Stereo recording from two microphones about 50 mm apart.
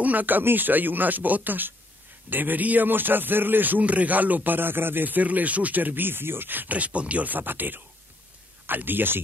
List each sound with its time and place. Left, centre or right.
0.0 s a man's voice: right